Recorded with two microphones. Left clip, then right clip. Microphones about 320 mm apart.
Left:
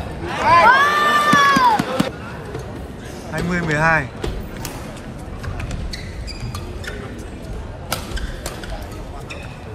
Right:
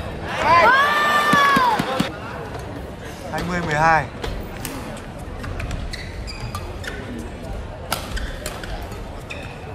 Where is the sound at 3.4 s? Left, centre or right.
Centre.